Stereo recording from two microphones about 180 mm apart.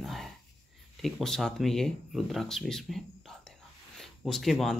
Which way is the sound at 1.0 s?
Centre (ahead or behind).